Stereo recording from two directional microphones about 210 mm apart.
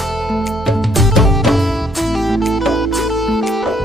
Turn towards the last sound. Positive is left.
turn(degrees=0)  # may be behind; listen again after turning